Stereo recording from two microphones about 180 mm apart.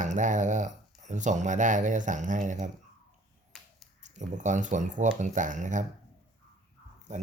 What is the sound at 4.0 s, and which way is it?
Speech, 40° right (ahead or behind).